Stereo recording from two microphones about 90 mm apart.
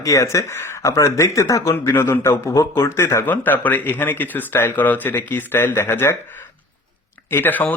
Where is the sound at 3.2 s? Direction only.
20° left (ahead or behind).